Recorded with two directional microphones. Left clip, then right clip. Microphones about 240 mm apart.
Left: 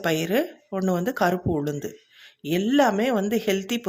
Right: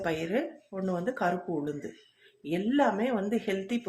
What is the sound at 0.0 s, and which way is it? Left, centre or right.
Speech, left.